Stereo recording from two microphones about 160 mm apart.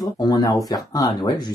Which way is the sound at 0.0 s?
25° left (ahead or behind).